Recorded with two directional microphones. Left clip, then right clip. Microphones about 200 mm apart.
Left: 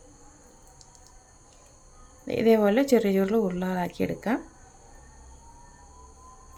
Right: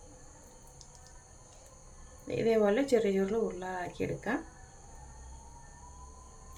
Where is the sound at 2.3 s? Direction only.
55° left (ahead or behind).